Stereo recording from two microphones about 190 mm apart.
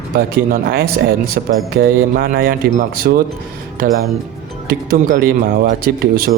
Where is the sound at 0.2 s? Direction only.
50° right (ahead or behind).